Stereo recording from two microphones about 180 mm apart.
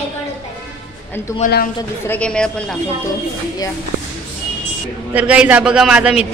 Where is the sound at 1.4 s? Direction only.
45° left (ahead or behind).